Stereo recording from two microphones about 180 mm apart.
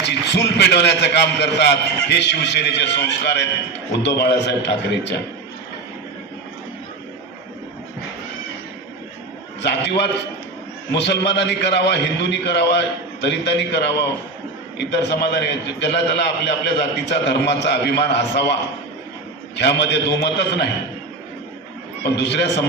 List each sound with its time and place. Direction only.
0.0 s a man's voice: 70° left (ahead or behind)
9.6 s a man's voice: 70° left (ahead or behind)
19.5 s a man's voice: 70° left (ahead or behind)
22.0 s a man's voice: 70° left (ahead or behind)